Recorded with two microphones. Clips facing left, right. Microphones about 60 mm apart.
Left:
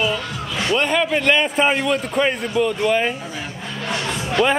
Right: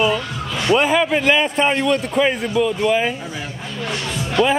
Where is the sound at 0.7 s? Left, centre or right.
Centre.